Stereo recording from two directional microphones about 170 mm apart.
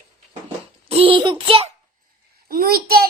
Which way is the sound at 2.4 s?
60° right (ahead or behind).